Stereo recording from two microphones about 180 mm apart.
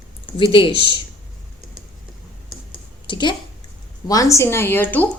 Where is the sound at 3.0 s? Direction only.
25° left (ahead or behind).